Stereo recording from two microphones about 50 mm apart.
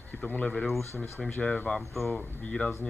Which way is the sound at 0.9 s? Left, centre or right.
Left.